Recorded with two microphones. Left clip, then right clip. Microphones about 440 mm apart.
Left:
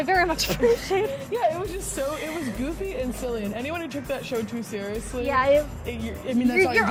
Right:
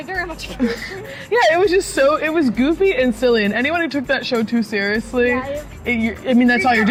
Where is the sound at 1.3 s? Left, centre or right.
Right.